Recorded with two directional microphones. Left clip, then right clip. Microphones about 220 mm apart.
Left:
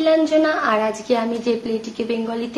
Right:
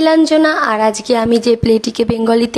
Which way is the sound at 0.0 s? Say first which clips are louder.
Right 5 dB; 50° right (ahead or behind).